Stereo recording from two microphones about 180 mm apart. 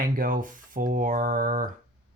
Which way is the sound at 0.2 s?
50° right (ahead or behind).